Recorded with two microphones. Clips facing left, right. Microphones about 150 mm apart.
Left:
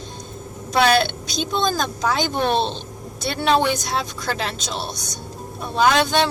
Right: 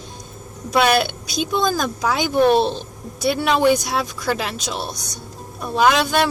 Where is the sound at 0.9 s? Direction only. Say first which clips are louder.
Even; 10° right (ahead or behind).